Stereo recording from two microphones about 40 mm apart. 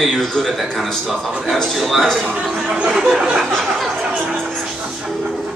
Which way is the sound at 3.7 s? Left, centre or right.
Centre.